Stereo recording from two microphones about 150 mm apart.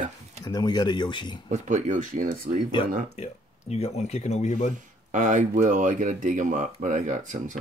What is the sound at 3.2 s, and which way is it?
Speech, 45° left (ahead or behind).